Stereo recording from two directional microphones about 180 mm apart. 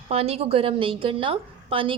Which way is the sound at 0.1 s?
35° right (ahead or behind).